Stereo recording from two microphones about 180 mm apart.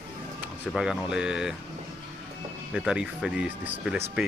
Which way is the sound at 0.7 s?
5° right (ahead or behind).